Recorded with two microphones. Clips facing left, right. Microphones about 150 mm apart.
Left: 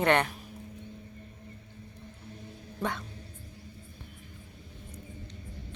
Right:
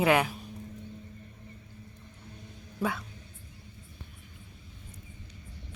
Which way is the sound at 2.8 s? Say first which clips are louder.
Right 2 dB; 5° right (ahead or behind).